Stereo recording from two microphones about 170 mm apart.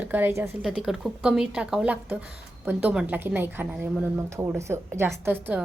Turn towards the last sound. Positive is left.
turn(degrees=-10)  # may be behind; listen again after turning